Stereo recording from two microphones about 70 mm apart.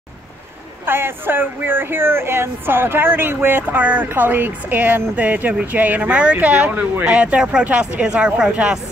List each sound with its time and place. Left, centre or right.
0.8 s speech: right; by 8.7 s centre